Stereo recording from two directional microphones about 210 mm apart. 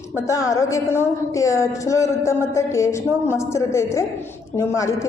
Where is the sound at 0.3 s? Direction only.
15° left (ahead or behind).